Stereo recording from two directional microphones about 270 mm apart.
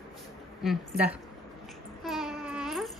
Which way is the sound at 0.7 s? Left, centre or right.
Centre.